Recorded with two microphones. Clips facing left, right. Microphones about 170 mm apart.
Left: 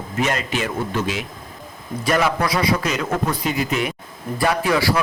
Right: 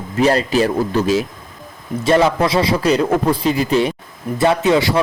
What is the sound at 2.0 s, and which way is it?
A man's voice, 25° right (ahead or behind).